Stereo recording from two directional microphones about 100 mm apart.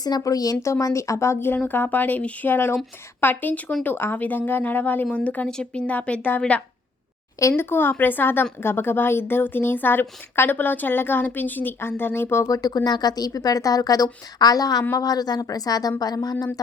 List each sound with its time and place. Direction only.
0.0 s a woman's voice: 40° left (ahead or behind); by 6.4 s 15° left (ahead or behind)
7.3 s a woman's voice: 25° left (ahead or behind)
12.5 s speech: 40° left (ahead or behind)